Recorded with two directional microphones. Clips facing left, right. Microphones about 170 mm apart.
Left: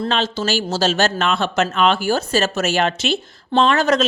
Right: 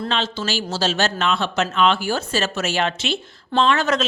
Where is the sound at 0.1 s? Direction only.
45° left (ahead or behind).